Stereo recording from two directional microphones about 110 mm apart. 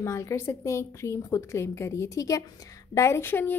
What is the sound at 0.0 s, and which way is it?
A woman's voice, 25° left (ahead or behind).